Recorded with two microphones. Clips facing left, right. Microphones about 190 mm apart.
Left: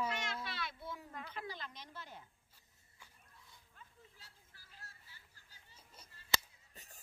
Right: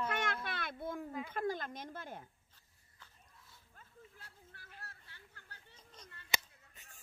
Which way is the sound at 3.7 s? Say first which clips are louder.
Right 5 dB; 55° right (ahead or behind).